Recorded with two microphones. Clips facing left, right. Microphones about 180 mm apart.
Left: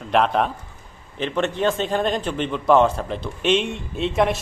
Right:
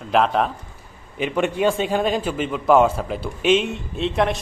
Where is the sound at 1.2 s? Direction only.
10° right (ahead or behind).